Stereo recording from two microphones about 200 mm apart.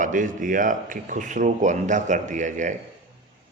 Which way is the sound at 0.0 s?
40° right (ahead or behind).